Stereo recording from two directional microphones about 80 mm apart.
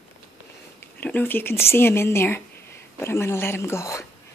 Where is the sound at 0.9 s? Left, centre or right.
Centre; by 4.0 s left.